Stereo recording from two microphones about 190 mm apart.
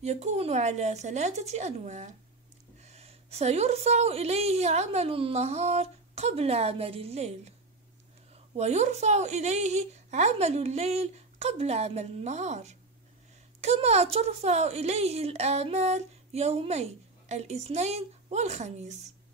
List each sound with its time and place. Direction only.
0.0 s a woman's voice: 35° right (ahead or behind)
8.5 s a woman's voice: 35° right (ahead or behind)